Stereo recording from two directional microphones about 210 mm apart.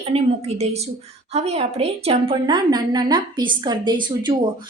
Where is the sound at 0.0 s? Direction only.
30° right (ahead or behind).